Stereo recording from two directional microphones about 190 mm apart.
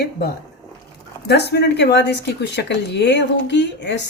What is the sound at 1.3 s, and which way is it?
Speech, 60° left (ahead or behind).